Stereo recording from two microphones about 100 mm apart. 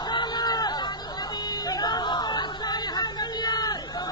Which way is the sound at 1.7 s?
45° left (ahead or behind).